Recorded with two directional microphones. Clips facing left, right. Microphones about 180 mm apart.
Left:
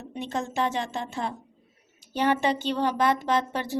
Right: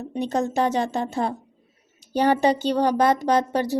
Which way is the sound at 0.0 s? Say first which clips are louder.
Right 7 dB; 35° right (ahead or behind).